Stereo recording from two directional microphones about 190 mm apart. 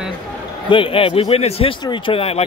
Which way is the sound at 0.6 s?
25° left (ahead or behind).